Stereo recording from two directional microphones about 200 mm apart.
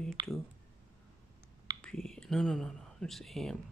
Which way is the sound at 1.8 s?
5° left (ahead or behind).